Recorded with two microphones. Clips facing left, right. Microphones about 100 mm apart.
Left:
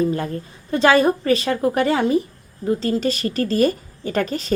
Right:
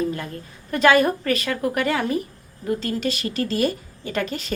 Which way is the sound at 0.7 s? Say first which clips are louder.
Left 2 dB; 30° left (ahead or behind).